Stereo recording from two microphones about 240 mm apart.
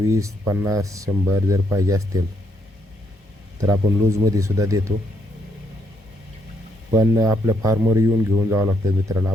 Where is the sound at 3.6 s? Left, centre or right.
Centre.